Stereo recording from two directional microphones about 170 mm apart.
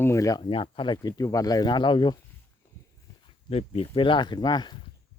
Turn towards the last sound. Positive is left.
turn(degrees=25)  # may be behind; listen again after turning